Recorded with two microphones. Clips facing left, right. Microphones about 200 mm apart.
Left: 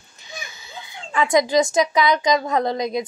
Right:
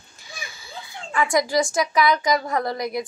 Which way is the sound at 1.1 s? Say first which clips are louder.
Left 3 dB; 20° left (ahead or behind).